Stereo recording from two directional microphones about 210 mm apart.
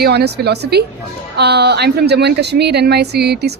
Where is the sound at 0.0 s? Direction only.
50° right (ahead or behind).